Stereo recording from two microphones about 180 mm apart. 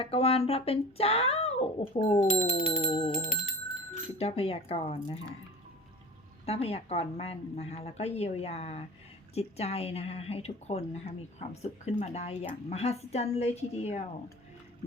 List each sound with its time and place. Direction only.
0.0 s speech: 30° left (ahead or behind)
6.4 s speech: 35° left (ahead or behind)